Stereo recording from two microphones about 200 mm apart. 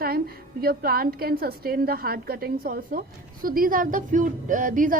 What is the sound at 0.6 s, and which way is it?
A woman's voice, 50° right (ahead or behind).